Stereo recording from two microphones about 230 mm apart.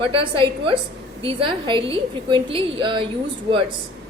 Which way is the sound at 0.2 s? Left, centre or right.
Right.